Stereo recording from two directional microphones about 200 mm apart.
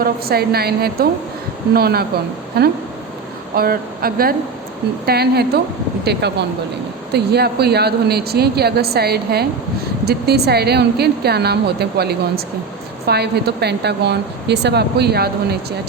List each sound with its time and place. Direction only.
0.0 s a woman's voice: 50° right (ahead or behind)